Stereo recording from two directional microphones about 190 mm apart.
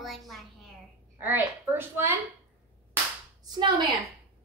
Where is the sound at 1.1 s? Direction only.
10° right (ahead or behind).